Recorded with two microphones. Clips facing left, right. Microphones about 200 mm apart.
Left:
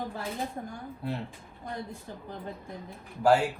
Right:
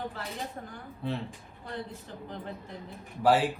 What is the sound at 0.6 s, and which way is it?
Speech, 20° left (ahead or behind).